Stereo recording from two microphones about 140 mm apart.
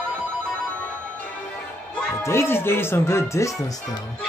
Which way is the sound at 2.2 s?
15° left (ahead or behind).